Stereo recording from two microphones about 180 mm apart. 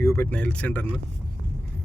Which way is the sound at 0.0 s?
15° left (ahead or behind).